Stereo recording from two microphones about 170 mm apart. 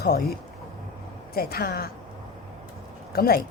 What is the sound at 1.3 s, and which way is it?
Speech, 65° left (ahead or behind).